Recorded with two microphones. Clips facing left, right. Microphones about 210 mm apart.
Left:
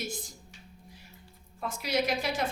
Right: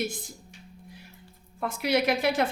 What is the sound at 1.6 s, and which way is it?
Speech, 60° right (ahead or behind).